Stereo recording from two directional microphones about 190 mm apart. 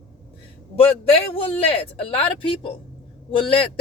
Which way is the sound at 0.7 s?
30° left (ahead or behind).